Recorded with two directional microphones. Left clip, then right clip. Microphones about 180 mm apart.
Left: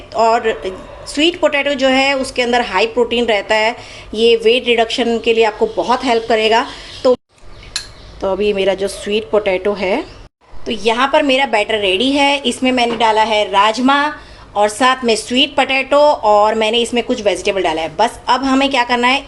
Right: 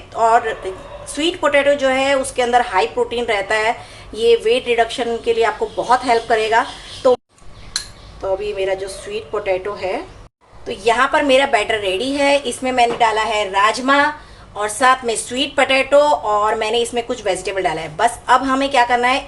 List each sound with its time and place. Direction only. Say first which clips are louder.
0.1 s a man's voice: left 2 dB; 25° left (ahead or behind)
8.2 s a woman's voice: left 5 dB; 35° left (ahead or behind)